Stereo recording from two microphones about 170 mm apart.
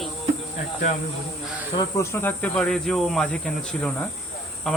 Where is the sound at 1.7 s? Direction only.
20° left (ahead or behind).